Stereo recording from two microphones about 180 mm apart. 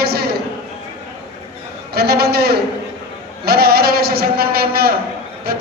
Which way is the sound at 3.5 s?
60° right (ahead or behind).